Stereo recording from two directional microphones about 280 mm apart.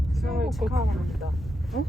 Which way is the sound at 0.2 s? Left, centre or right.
Centre.